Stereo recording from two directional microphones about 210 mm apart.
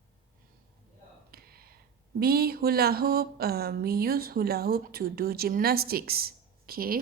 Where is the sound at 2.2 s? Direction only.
45° right (ahead or behind).